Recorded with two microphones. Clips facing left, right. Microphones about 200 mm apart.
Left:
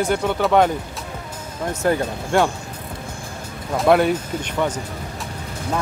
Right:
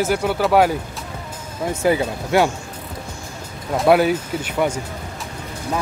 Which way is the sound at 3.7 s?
Centre (ahead or behind).